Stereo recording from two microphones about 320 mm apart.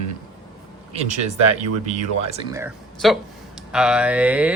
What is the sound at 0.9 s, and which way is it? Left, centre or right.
Speech, right.